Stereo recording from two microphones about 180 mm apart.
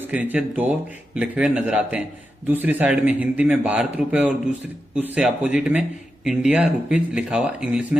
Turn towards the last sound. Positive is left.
turn(degrees=-5)  # may be behind; listen again after turning